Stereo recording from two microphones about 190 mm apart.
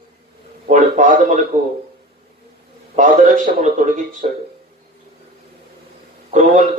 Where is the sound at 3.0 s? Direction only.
40° right (ahead or behind).